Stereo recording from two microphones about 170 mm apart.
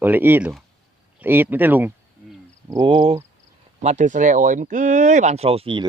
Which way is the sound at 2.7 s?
25° right (ahead or behind).